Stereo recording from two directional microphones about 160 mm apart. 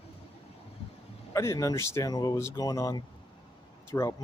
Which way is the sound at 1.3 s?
20° left (ahead or behind).